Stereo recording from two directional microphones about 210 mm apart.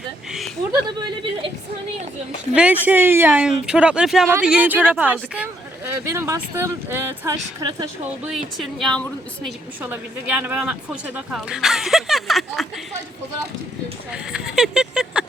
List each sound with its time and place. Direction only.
0.3 s speech: centre (ahead or behind)
0.7 s speech: 20° right (ahead or behind)
2.6 s speech: 5° right (ahead or behind)
8.3 s speech: centre (ahead or behind)
9.8 s speech: 10° right (ahead or behind)
14.1 s speech: 5° right (ahead or behind)